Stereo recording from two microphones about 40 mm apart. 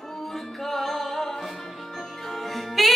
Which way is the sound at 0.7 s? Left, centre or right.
Centre.